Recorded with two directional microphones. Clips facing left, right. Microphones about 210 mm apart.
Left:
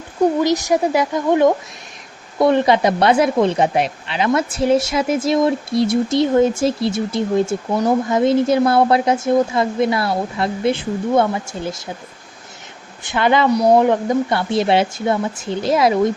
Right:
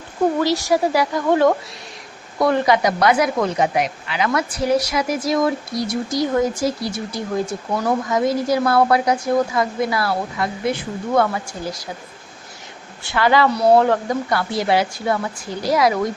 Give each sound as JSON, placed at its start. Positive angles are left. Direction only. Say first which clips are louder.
{"t": 0.3, "sound": "speech", "louder": "left 2 dB", "side_deg": 20}
{"t": 13.1, "sound": "speech", "louder": "left 1 dB", "side_deg": 20}